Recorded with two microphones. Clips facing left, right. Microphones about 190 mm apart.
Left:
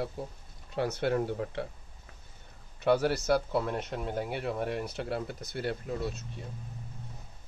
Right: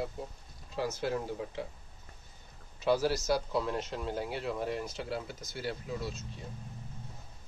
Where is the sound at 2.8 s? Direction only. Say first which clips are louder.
Left 2 dB; 60° left (ahead or behind).